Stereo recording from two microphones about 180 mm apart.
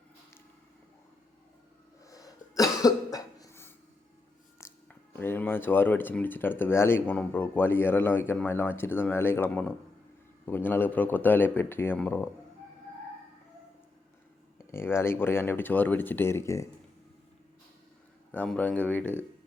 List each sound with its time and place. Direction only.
2.0 s cough: 20° left (ahead or behind)
4.6 s speech: 10° left (ahead or behind)
14.7 s speech: 15° left (ahead or behind)
18.3 s speech: 10° left (ahead or behind)